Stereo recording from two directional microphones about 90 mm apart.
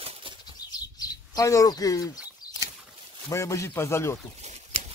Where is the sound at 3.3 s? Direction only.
30° left (ahead or behind).